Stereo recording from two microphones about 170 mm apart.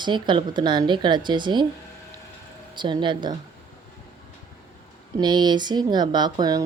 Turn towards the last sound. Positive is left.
turn(degrees=-20)  # may be behind; listen again after turning